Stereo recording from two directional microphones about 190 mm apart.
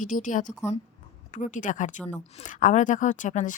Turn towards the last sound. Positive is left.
turn(degrees=40)  # may be behind; listen again after turning